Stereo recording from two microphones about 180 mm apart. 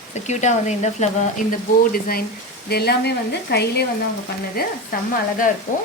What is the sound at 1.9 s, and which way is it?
Speech, 55° left (ahead or behind).